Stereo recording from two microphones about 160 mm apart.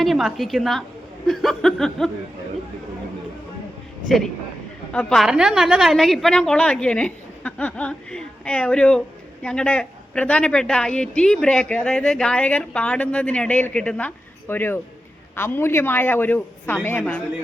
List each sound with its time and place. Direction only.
0.0 s a woman's voice: centre (ahead or behind)
4.9 s a woman's voice: 5° left (ahead or behind)